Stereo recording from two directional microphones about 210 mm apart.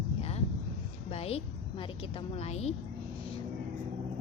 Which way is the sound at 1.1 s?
30° left (ahead or behind).